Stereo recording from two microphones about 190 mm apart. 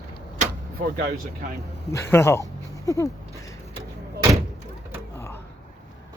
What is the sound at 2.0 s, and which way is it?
Speech, 15° left (ahead or behind).